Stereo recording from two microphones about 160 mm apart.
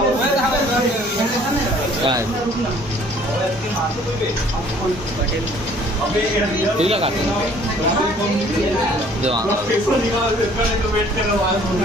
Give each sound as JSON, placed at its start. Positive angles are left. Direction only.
{"t": 6.8, "sound": "speech", "side_deg": -40}